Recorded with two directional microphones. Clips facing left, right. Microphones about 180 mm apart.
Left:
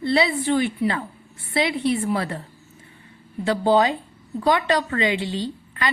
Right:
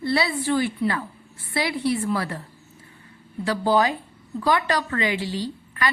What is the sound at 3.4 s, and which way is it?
A woman's voice, 25° left (ahead or behind).